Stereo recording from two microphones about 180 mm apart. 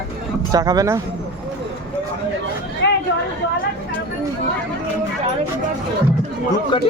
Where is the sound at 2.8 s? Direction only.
75° left (ahead or behind).